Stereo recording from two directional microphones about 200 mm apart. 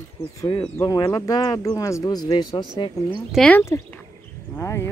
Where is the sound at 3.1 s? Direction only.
Centre (ahead or behind).